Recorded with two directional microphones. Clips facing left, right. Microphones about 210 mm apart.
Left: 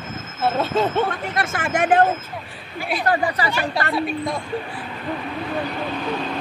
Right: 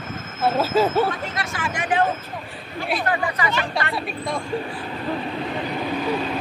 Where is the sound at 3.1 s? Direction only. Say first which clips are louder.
Left 6 dB; 35° left (ahead or behind).